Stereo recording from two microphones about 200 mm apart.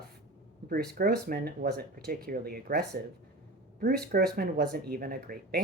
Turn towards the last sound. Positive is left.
turn(degrees=-45)  # may be behind; listen again after turning